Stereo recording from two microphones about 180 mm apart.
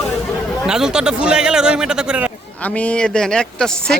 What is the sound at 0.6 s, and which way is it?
Speech, 5° right (ahead or behind).